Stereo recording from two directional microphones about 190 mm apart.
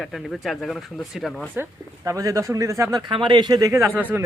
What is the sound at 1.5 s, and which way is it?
A man's voice, 15° right (ahead or behind).